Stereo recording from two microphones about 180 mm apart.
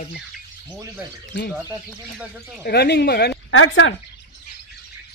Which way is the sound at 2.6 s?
65° left (ahead or behind).